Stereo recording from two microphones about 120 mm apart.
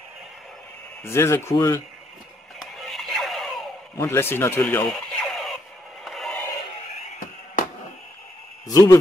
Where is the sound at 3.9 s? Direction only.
20° left (ahead or behind).